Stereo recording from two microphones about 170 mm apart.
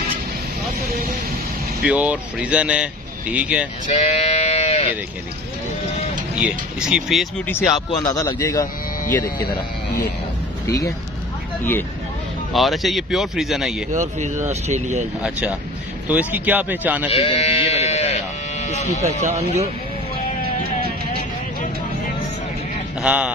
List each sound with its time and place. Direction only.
1.9 s speech: 5° right (ahead or behind)
3.8 s sheep: 45° left (ahead or behind)
6.4 s speech: 5° right (ahead or behind)
7.7 s a man's voice: 25° left (ahead or behind)
12.5 s speech: centre (ahead or behind)
13.9 s speech: 45° right (ahead or behind)
16.1 s speech: 10° right (ahead or behind)
17.1 s sheep: 35° left (ahead or behind)
19.2 s speech: 40° right (ahead or behind)
23.0 s speech: 5° right (ahead or behind)